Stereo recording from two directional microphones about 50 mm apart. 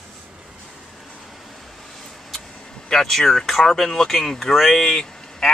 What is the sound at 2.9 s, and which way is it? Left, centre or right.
Speech, centre.